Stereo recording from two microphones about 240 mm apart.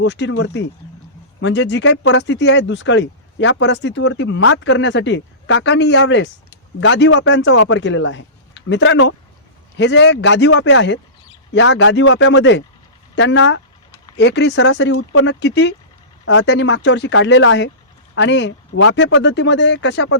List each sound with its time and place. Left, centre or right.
0.0 s speech: left